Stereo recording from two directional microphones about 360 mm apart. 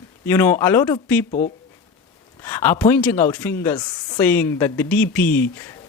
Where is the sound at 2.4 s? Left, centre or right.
Centre.